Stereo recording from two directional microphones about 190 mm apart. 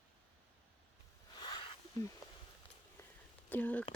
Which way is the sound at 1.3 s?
25° left (ahead or behind).